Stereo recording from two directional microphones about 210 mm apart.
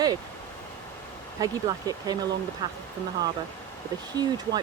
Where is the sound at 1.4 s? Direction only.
20° right (ahead or behind).